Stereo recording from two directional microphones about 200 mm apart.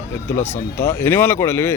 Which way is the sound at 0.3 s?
10° left (ahead or behind).